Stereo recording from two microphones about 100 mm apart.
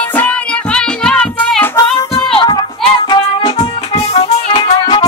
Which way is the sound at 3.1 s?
50° left (ahead or behind).